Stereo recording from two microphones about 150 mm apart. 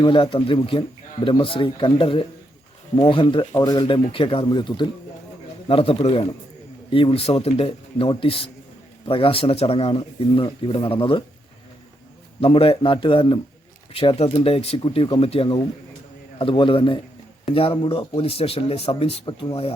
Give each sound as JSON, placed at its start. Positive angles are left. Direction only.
{"t": 0.0, "sound": "speech", "side_deg": 35}
{"t": 12.4, "sound": "speech", "side_deg": 40}